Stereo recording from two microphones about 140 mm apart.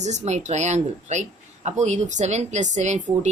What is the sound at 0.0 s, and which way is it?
A woman's voice, 55° right (ahead or behind).